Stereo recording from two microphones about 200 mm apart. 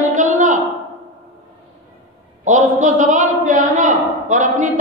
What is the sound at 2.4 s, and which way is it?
A woman's voice, 40° right (ahead or behind).